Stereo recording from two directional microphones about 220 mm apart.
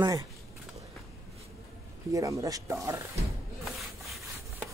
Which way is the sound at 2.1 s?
15° right (ahead or behind).